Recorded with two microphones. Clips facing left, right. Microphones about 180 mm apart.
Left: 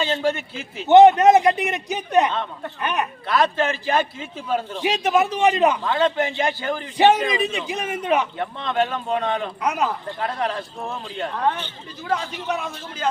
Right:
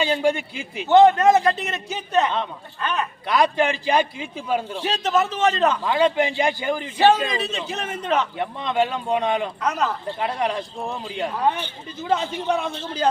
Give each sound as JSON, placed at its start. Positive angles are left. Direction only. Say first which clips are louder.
{"t": 0.0, "sound": "speech", "louder": "right 2 dB", "side_deg": -15}
{"t": 0.9, "sound": "a man's voice", "louder": "left 3 dB", "side_deg": 20}
{"t": 3.2, "sound": "speech", "louder": "right 1 dB", "side_deg": -15}
{"t": 4.8, "sound": "a man's voice", "louder": "left 4 dB", "side_deg": 15}
{"t": 5.8, "sound": "speech", "louder": "right 1 dB", "side_deg": -15}
{"t": 6.9, "sound": "a man's voice", "louder": "left 1 dB", "side_deg": 20}
{"t": 8.4, "sound": "speech", "louder": "right 1 dB", "side_deg": -15}
{"t": 9.6, "sound": "a man's voice", "louder": "left 2 dB", "side_deg": 10}
{"t": 10.2, "sound": "a man's voice", "louder": "right 2 dB", "side_deg": -15}